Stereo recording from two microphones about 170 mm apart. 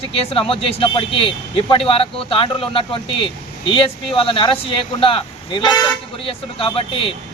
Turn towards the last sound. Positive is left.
turn(degrees=30)  # may be behind; listen again after turning